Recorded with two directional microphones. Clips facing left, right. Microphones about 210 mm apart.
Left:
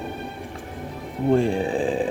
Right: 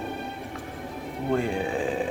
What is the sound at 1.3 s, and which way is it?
Speech, 30° left (ahead or behind).